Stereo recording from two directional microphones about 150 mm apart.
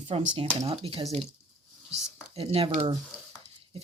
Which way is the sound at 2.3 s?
40° right (ahead or behind).